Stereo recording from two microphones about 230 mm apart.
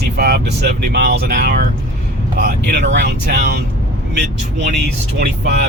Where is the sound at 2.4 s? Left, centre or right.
Right.